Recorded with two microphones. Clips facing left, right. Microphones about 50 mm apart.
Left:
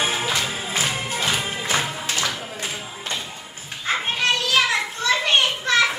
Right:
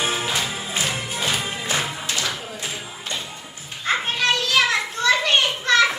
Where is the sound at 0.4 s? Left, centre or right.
Left.